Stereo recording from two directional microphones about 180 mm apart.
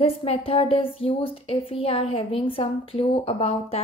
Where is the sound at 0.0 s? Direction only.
30° left (ahead or behind).